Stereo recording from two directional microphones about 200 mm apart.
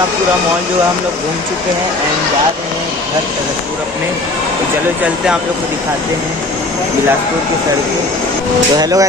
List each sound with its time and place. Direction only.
8.7 s speech: 20° right (ahead or behind)